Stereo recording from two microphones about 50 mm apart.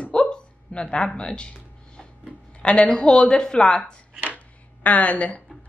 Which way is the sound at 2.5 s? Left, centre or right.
Left.